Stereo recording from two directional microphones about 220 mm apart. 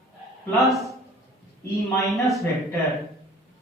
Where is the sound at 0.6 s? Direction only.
Centre (ahead or behind).